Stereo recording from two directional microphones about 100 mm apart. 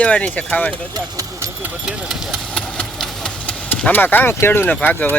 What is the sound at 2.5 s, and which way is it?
Engine, 10° left (ahead or behind).